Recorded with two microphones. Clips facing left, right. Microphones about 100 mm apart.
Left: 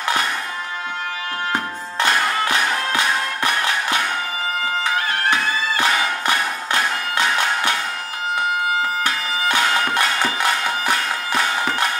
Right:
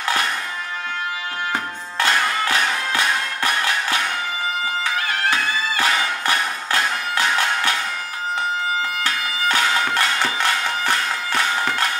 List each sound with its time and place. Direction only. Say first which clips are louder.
1.5 s music: left 2 dB; 20° left (ahead or behind)
5.9 s music: left 1 dB; 15° left (ahead or behind)
9.0 s music: left 1 dB; 20° left (ahead or behind)